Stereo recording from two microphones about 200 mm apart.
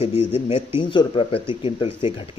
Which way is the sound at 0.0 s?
30° left (ahead or behind).